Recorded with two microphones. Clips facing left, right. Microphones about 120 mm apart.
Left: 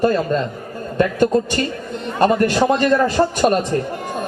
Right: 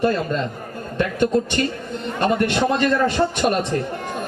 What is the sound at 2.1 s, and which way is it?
A man's voice, 40° left (ahead or behind).